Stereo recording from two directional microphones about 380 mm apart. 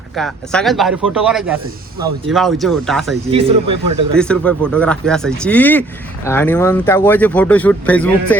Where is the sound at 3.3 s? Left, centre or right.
Centre.